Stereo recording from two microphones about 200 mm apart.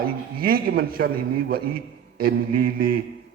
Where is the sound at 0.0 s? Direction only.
50° right (ahead or behind).